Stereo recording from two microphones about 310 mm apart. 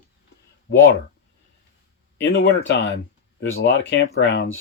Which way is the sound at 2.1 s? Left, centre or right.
Left.